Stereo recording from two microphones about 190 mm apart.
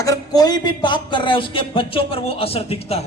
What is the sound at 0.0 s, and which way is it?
Speech, 20° left (ahead or behind).